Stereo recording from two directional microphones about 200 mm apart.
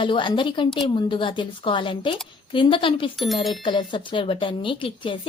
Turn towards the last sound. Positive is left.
turn(degrees=25)  # may be behind; listen again after turning